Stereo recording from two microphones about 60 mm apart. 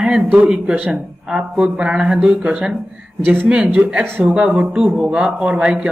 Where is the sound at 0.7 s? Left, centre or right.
Right.